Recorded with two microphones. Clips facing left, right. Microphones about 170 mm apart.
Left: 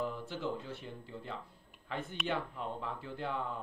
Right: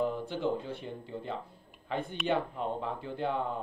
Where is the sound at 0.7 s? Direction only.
20° right (ahead or behind).